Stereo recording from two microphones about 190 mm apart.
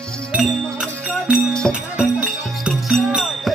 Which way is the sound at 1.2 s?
Centre (ahead or behind).